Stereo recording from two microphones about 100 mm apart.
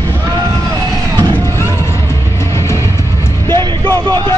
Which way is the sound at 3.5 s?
25° left (ahead or behind).